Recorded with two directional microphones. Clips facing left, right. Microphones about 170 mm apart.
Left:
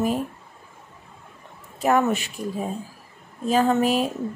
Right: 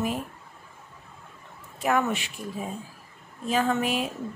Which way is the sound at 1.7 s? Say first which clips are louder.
Left 5 dB; 40° left (ahead or behind).